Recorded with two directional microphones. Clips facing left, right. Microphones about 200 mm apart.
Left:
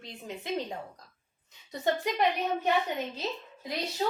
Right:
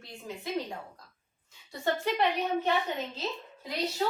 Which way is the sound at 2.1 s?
15° left (ahead or behind).